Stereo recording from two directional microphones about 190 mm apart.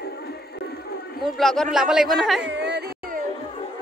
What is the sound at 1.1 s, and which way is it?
Speech, centre (ahead or behind).